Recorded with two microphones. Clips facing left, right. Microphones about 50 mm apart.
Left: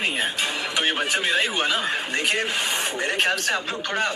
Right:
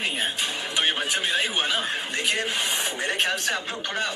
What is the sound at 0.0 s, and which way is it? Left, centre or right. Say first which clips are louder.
Music: left 3 dB; left.